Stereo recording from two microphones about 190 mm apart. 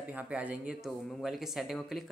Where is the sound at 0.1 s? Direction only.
10° right (ahead or behind).